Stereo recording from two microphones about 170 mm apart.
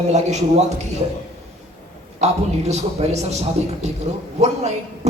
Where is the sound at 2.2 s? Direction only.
40° right (ahead or behind).